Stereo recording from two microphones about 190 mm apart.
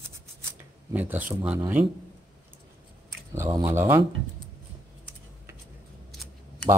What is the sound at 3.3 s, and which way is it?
Speech, 15° right (ahead or behind).